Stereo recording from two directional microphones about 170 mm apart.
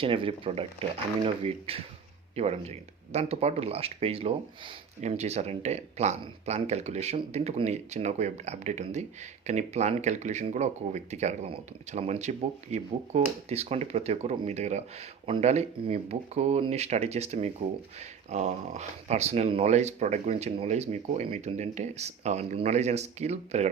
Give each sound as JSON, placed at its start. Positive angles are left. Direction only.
{"t": 0.0, "sound": "speech", "side_deg": -30}